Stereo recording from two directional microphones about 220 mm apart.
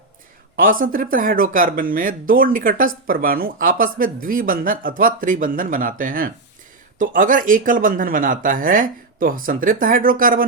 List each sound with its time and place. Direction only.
0.5 s speech: 40° right (ahead or behind)